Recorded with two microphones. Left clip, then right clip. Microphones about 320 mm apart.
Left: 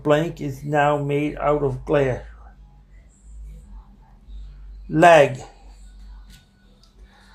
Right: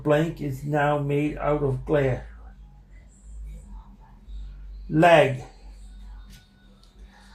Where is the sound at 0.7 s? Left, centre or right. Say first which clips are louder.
Left 4 dB; left.